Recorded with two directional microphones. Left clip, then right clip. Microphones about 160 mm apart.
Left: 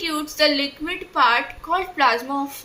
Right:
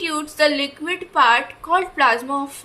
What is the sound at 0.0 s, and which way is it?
A woman's voice, 15° right (ahead or behind).